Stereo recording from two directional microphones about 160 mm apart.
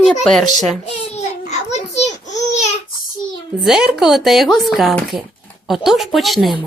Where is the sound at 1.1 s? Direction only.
45° left (ahead or behind).